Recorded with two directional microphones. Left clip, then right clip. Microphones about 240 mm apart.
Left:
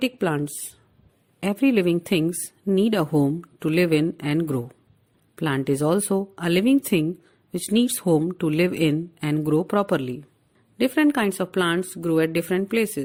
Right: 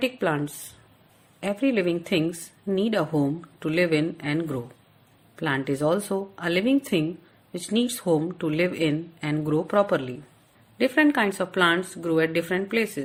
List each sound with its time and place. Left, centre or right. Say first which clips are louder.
0.0 s a woman's voice: left 1 dB; left